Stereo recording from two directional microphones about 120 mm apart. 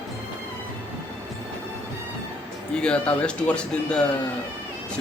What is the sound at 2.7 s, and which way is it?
Speech, 10° left (ahead or behind).